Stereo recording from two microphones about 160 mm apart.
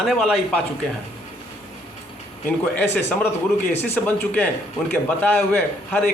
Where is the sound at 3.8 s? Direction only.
10° left (ahead or behind).